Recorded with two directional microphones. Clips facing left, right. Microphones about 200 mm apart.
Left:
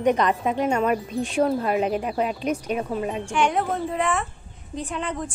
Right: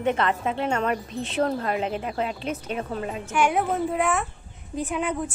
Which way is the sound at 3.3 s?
5° right (ahead or behind).